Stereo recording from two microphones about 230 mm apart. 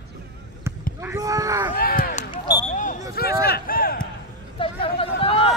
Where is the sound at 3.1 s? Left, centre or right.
Left.